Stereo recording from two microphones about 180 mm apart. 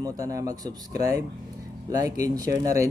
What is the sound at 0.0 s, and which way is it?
Speech, 20° right (ahead or behind).